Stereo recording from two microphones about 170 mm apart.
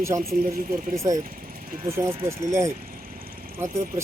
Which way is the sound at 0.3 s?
55° right (ahead or behind).